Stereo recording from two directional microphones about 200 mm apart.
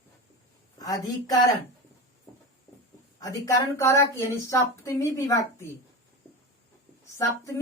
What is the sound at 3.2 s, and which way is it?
A woman's voice, 15° left (ahead or behind).